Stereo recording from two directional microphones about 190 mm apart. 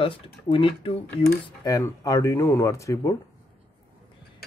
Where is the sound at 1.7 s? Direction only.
20° left (ahead or behind).